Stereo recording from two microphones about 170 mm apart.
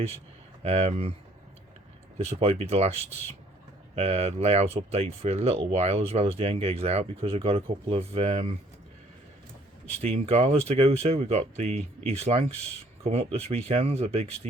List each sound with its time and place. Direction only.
0.6 s speech: 40° right (ahead or behind)
2.1 s speech: 35° right (ahead or behind)
10.0 s speech: 40° right (ahead or behind)
13.7 s speech: 35° right (ahead or behind)